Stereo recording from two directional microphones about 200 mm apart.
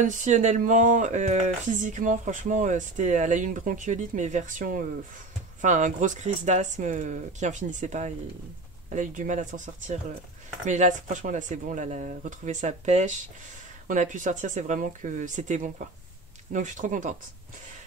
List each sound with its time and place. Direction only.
0.0 s speech: 40° right (ahead or behind)